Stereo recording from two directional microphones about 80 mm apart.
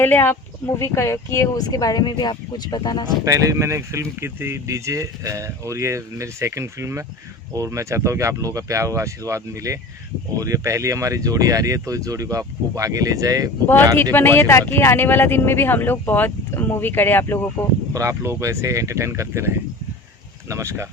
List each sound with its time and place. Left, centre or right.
0.0 s speech: left
0.8 s speech: left
1.5 s speech: left
3.2 s speech: right
14.0 s speech: left
17.9 s speech: right